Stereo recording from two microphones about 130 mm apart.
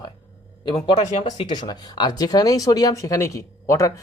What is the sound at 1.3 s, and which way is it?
Speech, 40° left (ahead or behind).